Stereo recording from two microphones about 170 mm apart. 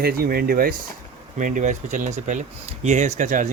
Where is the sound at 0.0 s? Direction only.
65° right (ahead or behind).